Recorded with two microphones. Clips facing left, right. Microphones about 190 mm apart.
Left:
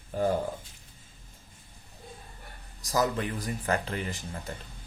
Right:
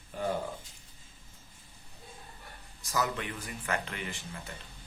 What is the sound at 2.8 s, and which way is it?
Speech, 35° left (ahead or behind).